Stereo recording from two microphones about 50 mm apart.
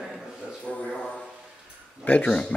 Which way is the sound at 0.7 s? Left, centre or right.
Centre.